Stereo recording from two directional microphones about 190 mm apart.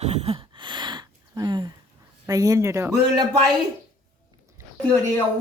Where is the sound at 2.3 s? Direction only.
20° right (ahead or behind).